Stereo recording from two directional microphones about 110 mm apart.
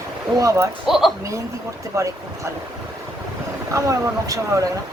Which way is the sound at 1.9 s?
30° right (ahead or behind).